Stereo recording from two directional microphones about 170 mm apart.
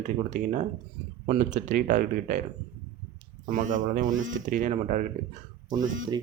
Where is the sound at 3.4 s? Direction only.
50° right (ahead or behind).